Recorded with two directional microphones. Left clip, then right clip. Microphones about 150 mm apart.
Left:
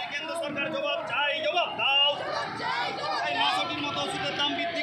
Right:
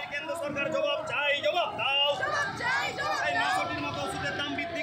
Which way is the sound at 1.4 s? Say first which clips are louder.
Left 1 dB; 20° right (ahead or behind).